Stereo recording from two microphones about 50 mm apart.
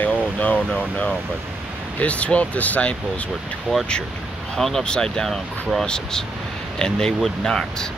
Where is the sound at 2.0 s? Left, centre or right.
Left.